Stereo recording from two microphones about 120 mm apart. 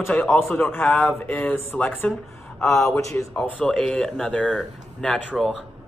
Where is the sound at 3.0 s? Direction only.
25° left (ahead or behind).